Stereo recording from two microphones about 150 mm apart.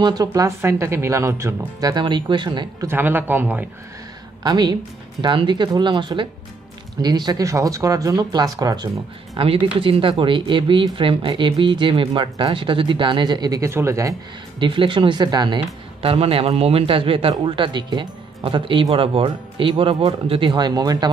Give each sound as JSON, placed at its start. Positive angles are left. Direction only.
{"t": 0.0, "sound": "speech", "side_deg": -25}
{"t": 2.9, "sound": "speech", "side_deg": -15}
{"t": 4.4, "sound": "speech", "side_deg": -25}
{"t": 14.6, "sound": "speech", "side_deg": -35}